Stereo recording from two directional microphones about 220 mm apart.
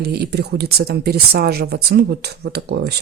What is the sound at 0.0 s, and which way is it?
Speech, 45° right (ahead or behind).